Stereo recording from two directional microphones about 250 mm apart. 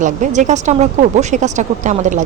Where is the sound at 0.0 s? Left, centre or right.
Right.